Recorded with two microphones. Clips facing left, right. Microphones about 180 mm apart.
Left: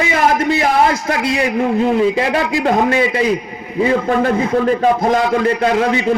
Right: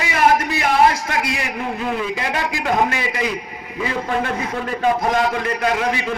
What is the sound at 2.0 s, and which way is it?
A man's voice, 30° left (ahead or behind).